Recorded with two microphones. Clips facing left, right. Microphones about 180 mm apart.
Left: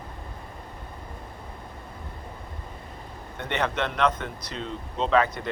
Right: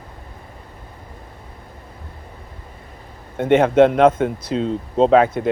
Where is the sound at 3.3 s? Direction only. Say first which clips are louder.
Right 15 dB; 50° right (ahead or behind).